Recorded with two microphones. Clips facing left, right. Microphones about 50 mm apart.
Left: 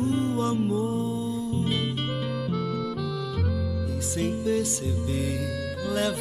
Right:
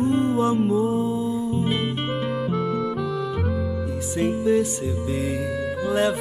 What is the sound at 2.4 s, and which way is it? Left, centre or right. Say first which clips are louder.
Music: right 5 dB; centre.